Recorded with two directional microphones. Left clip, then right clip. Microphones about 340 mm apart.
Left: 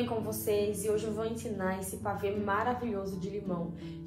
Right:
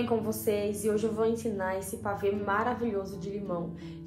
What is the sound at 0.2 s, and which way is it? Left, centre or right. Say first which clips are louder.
A woman's voice: right 1 dB; centre.